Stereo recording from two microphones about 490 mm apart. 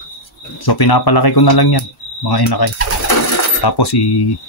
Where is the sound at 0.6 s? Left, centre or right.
Left.